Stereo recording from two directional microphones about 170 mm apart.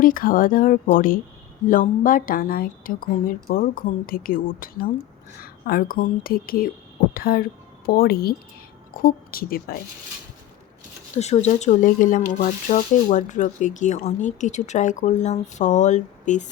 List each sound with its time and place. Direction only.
0.0 s a woman's voice: 55° left (ahead or behind)
11.1 s speech: 40° left (ahead or behind)